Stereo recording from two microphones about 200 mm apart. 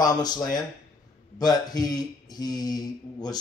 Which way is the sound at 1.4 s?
20° left (ahead or behind).